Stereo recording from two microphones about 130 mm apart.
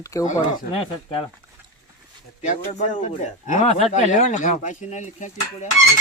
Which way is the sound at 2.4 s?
70° left (ahead or behind).